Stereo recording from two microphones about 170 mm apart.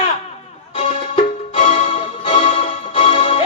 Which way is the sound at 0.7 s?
35° left (ahead or behind).